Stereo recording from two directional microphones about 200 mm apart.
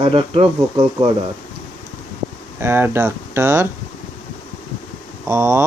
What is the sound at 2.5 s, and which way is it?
Speech, 10° right (ahead or behind).